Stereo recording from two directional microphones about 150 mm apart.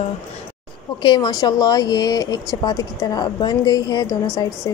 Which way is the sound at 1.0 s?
30° left (ahead or behind).